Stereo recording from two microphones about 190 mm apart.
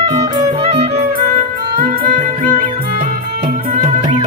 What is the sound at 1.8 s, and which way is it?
Music, 45° right (ahead or behind).